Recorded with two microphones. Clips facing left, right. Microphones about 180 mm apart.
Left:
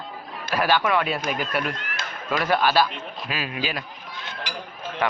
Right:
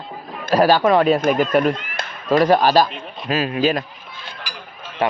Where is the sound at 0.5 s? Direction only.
40° right (ahead or behind).